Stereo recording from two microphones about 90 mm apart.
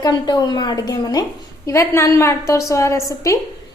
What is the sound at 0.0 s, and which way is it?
A woman's voice, 45° left (ahead or behind).